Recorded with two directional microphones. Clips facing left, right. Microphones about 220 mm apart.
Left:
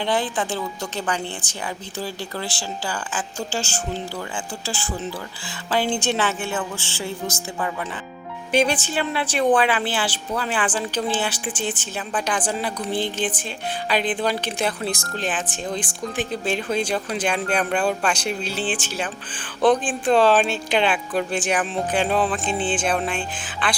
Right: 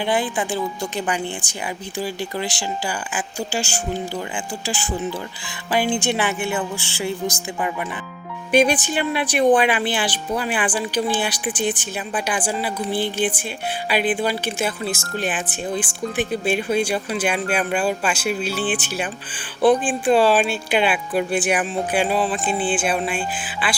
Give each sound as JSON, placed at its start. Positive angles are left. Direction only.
{"t": 0.0, "sound": "speech", "side_deg": -10}